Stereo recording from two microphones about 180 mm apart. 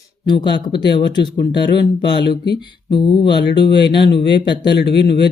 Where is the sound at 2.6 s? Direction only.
25° left (ahead or behind).